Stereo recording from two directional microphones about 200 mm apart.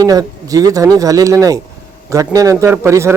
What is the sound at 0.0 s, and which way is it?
Speech, 20° right (ahead or behind).